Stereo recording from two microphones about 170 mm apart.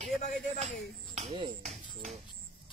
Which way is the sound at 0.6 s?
35° right (ahead or behind).